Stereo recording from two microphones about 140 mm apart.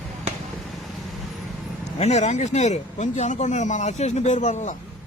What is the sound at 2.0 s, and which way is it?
Speech, 55° left (ahead or behind).